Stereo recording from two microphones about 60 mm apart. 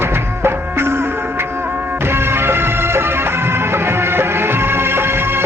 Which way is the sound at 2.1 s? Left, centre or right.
Right.